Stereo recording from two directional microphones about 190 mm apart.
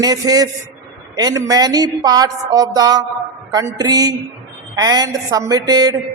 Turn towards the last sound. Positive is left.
turn(degrees=-20)  # may be behind; listen again after turning